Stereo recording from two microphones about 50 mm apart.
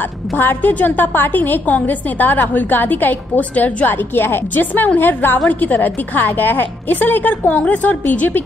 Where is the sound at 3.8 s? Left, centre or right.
Left.